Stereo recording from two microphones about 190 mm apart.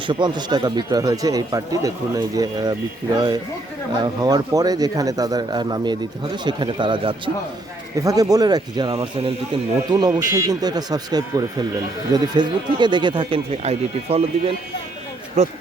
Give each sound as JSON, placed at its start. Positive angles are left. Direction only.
{"t": 0.0, "sound": "speech", "side_deg": -25}
{"t": 4.0, "sound": "speech", "side_deg": -20}